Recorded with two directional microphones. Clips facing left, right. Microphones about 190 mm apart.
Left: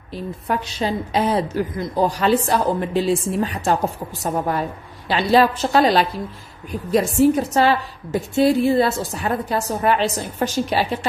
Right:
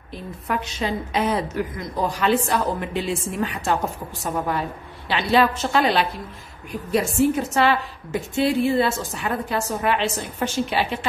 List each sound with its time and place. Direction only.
0.1 s a woman's voice: 35° left (ahead or behind)